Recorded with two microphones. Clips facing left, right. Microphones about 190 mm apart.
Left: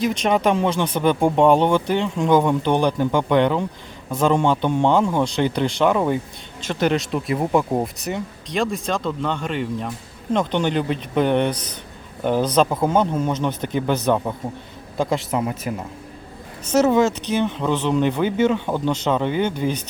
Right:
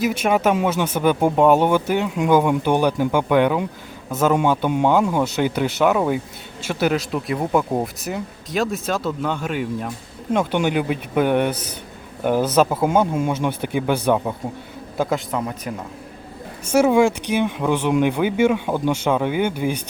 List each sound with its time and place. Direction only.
0.0 s a man's voice: 5° right (ahead or behind)
15.3 s speech: 5° left (ahead or behind)
16.6 s speech: 10° right (ahead or behind)